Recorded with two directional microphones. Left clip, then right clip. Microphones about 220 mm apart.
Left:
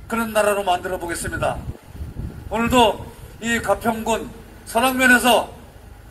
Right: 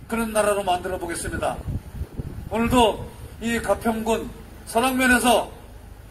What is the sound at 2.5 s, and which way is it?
A man's voice, 15° left (ahead or behind).